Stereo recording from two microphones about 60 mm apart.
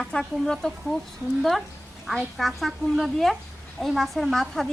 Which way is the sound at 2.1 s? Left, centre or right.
Centre.